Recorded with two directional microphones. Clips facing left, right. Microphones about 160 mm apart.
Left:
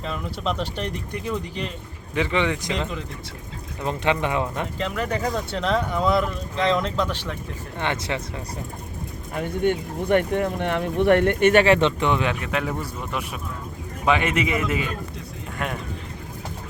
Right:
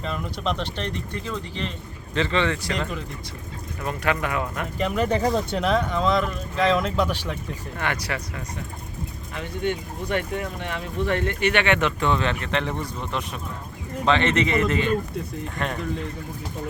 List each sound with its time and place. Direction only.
0.0 s speech: centre (ahead or behind)
2.7 s speech: centre (ahead or behind)
3.8 s speech: 20° left (ahead or behind)
4.8 s speech: 15° right (ahead or behind)
5.5 s speech: 5° right (ahead or behind)
5.9 s speech: 10° left (ahead or behind); by 7.3 s 15° right (ahead or behind)
7.8 s speech: 25° left (ahead or behind)
9.3 s speech: 50° left (ahead or behind)
11.6 s speech: 30° left (ahead or behind); by 15.8 s 5° left (ahead or behind)